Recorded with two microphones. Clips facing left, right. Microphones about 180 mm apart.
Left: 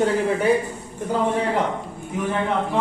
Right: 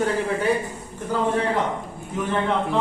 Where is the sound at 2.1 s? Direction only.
10° left (ahead or behind).